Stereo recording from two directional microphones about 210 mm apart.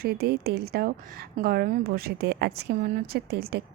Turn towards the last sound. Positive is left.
turn(degrees=-50)  # may be behind; listen again after turning